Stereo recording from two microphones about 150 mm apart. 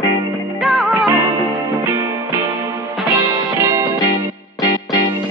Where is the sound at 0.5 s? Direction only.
Centre (ahead or behind).